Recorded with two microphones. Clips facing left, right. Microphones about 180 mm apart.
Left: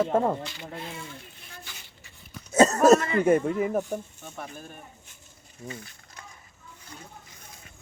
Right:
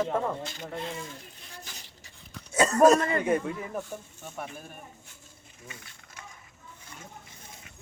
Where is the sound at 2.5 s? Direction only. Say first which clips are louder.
Left 2 dB; 45° left (ahead or behind).